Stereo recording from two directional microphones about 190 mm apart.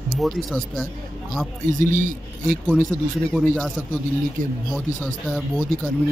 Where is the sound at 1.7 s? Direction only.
45° right (ahead or behind).